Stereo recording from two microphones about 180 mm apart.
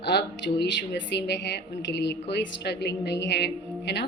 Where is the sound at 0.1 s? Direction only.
70° left (ahead or behind).